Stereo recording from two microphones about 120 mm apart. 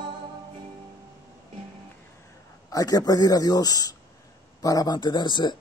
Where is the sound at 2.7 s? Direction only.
30° left (ahead or behind).